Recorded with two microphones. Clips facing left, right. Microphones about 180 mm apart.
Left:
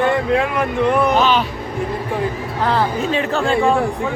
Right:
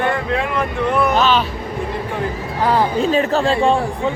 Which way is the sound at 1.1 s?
15° left (ahead or behind).